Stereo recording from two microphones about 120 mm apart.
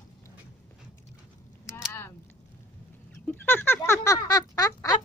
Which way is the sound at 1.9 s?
20° left (ahead or behind).